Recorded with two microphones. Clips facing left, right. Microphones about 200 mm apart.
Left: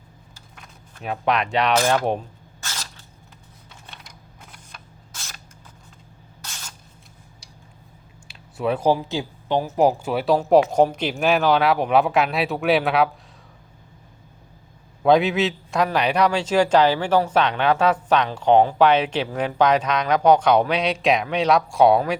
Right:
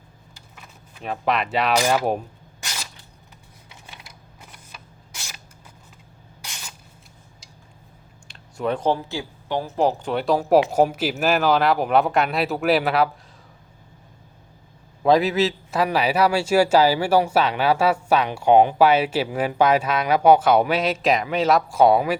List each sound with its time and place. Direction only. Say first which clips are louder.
0.5 s speech: even; 5° right (ahead or behind)
2.6 s a sound: even; 15° right (ahead or behind)
3.7 s camera: even; 10° right (ahead or behind)
6.4 s spray: even; 15° right (ahead or behind)
8.3 s speech: left 1 dB; 5° left (ahead or behind)
15.0 s a man's voice: even; centre (ahead or behind)